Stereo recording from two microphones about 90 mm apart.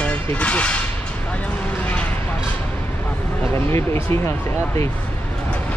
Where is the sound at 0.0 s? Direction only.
15° left (ahead or behind).